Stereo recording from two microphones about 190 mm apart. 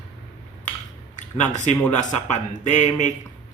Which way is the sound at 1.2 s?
40° left (ahead or behind).